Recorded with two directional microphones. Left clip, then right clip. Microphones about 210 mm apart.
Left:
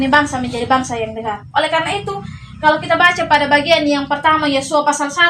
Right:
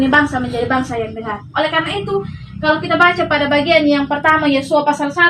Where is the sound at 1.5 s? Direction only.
45° left (ahead or behind).